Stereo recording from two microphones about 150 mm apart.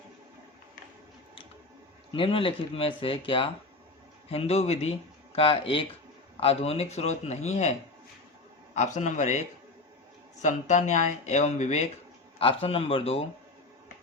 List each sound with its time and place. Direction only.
2.1 s speech: 35° left (ahead or behind)
8.7 s speech: 50° left (ahead or behind)
10.4 s speech: 55° left (ahead or behind)
12.4 s speech: 40° left (ahead or behind)